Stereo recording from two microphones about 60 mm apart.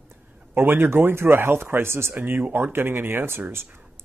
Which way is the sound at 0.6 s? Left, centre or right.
Right.